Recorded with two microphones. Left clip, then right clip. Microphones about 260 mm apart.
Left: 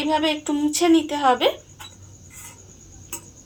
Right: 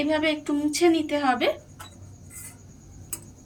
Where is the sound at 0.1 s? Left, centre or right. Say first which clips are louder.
Left 3 dB; centre.